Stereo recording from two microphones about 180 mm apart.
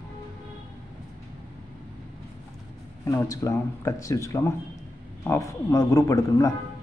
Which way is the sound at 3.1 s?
15° left (ahead or behind).